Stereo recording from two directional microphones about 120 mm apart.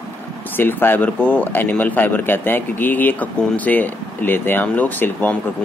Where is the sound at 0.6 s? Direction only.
15° left (ahead or behind).